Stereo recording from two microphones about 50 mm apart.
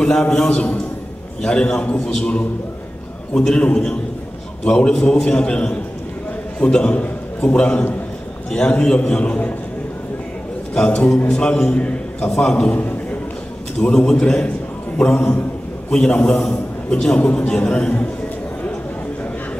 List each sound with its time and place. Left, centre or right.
0.0 s a man's voice: centre
11.2 s a man's voice: centre
12.7 s a sound: left
13.7 s a man's voice: centre